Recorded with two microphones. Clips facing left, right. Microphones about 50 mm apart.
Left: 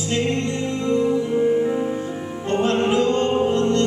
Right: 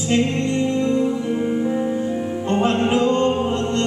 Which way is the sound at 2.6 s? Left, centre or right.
Right.